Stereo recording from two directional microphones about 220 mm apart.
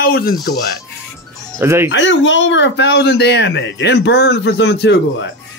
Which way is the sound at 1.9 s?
55° left (ahead or behind).